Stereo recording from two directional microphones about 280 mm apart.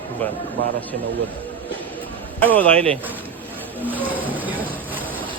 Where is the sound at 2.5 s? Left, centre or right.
Centre.